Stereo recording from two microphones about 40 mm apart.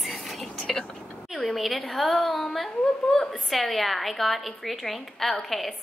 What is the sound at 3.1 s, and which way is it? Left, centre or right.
Speech, centre.